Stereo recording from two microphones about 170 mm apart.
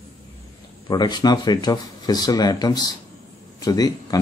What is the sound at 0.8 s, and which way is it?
Speech, 25° left (ahead or behind).